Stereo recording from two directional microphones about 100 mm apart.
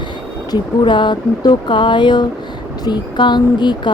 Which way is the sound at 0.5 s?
50° left (ahead or behind).